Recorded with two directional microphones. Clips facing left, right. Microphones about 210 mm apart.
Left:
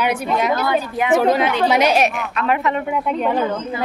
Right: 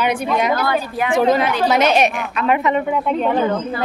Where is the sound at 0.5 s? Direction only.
20° left (ahead or behind).